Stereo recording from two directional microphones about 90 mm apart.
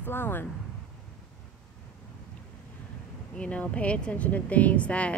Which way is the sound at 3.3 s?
15° left (ahead or behind).